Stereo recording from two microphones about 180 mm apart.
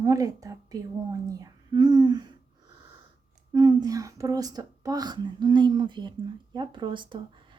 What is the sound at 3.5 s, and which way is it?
Speech, 20° right (ahead or behind).